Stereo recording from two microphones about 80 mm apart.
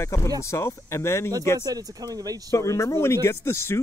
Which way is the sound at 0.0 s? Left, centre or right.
Left.